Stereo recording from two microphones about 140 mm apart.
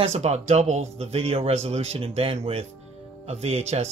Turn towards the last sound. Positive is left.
turn(degrees=-50)  # may be behind; listen again after turning